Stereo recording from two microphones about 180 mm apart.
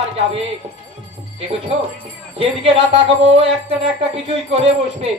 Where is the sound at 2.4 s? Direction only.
30° right (ahead or behind).